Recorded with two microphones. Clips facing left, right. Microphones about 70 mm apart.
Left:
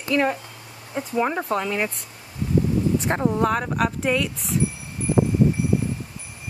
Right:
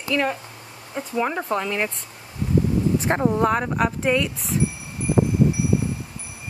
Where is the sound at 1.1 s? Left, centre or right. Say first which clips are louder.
Left 1 dB; centre.